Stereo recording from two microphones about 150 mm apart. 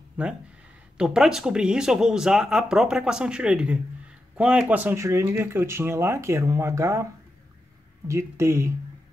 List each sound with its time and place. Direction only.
0.2 s speech: 10° right (ahead or behind)
8.1 s speech: 20° right (ahead or behind)